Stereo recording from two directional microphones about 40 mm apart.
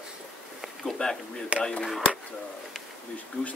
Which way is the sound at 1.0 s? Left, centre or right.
Left.